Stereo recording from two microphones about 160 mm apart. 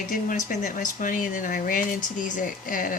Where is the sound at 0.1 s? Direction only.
55° left (ahead or behind).